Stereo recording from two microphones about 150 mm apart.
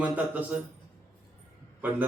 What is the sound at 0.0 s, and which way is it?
Speech, 10° right (ahead or behind).